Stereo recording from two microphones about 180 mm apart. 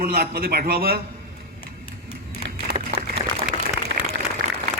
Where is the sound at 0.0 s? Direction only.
55° right (ahead or behind).